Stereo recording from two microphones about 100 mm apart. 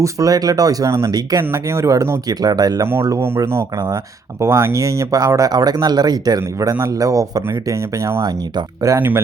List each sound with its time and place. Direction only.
0.0 s speech: 35° right (ahead or behind)
3.2 s speech: 25° right (ahead or behind)
3.8 s speech: 35° right (ahead or behind)
9.0 s speech: 20° right (ahead or behind)